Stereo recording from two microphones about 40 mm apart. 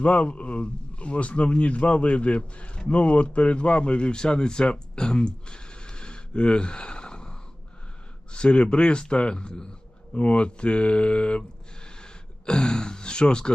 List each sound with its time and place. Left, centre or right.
0.0 s a man's voice: left